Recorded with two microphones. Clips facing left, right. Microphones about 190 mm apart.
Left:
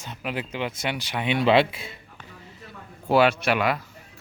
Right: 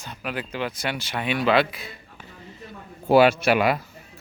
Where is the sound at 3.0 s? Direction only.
5° right (ahead or behind).